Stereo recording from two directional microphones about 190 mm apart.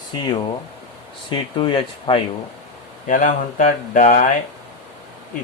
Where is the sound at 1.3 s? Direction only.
25° left (ahead or behind).